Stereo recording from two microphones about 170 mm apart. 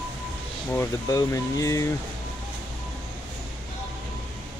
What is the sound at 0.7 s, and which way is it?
Speech, 15° left (ahead or behind).